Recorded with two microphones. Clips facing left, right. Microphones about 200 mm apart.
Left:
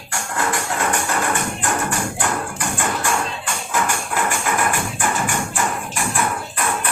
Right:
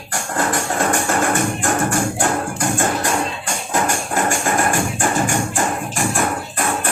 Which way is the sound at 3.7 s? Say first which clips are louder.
Right 3 dB; 45° right (ahead or behind).